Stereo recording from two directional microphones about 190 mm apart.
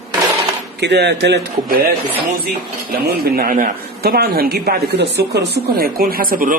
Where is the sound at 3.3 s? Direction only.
50° right (ahead or behind).